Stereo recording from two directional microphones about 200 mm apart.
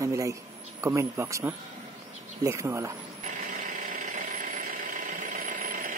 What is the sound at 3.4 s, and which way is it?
Engine, 40° right (ahead or behind).